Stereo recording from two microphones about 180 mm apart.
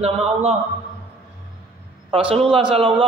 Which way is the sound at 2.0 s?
30° right (ahead or behind).